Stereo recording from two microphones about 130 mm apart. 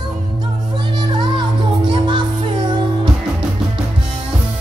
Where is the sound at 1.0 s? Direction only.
35° right (ahead or behind).